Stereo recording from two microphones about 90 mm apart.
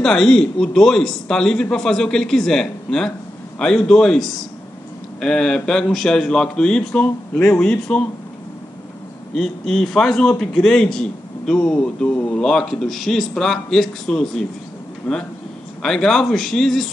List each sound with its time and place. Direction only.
0.0 s speech: 5° left (ahead or behind)
9.3 s a man's voice: 5° left (ahead or behind)
15.1 s a man's voice: 15° left (ahead or behind)